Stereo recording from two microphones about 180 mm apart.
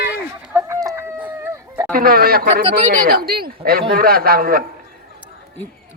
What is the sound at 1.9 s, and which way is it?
Speech, 55° right (ahead or behind).